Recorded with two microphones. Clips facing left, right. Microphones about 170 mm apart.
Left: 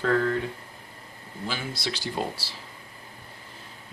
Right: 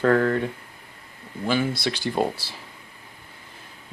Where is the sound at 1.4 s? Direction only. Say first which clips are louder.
Right 9 dB; 55° right (ahead or behind).